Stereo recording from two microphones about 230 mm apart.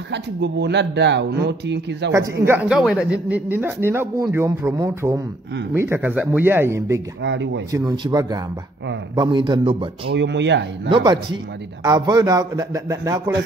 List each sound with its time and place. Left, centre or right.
0.1 s speech: right
2.4 s speech: centre
7.2 s speech: right
7.7 s a man's voice: centre
10.1 s speech: right
10.9 s a man's voice: right